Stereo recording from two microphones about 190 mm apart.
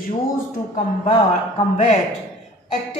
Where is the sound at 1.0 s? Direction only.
35° left (ahead or behind).